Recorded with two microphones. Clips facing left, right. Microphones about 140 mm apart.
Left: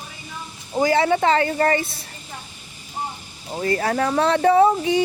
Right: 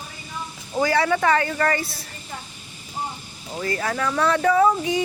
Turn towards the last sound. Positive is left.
turn(degrees=30)  # may be behind; listen again after turning